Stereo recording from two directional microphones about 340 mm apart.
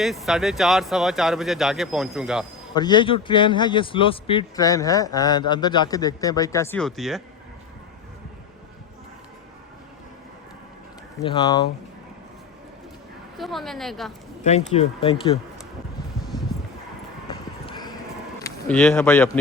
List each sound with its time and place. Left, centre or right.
0.0 s speech: centre
2.7 s a man's voice: centre
11.3 s a man's voice: centre
13.3 s speech: centre
14.7 s a man's voice: centre
17.2 s a sound: centre
18.4 s speech: centre